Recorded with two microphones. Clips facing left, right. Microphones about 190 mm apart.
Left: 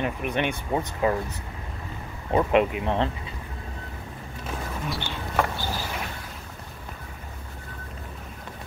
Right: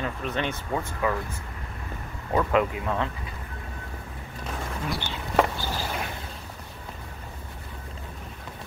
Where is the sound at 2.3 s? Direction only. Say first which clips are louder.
Left 2 dB; 20° left (ahead or behind).